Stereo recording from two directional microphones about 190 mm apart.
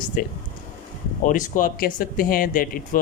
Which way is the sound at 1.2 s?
45° left (ahead or behind).